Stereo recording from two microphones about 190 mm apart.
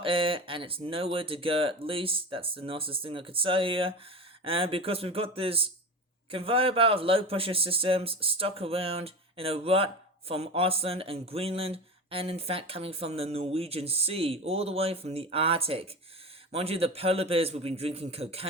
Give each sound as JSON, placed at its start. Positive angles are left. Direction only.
{"t": 0.0, "sound": "speech", "side_deg": -30}